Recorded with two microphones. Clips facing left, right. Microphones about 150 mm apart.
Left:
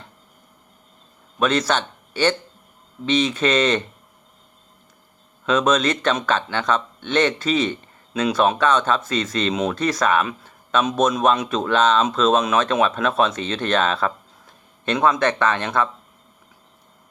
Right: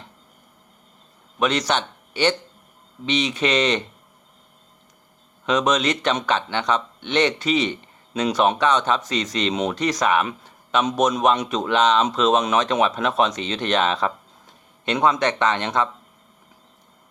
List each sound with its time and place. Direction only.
1.4 s a man's voice: 15° right (ahead or behind)
5.5 s a man's voice: 15° right (ahead or behind)